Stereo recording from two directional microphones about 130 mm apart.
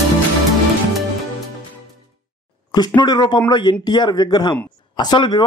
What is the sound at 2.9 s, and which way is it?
Speech, 35° left (ahead or behind).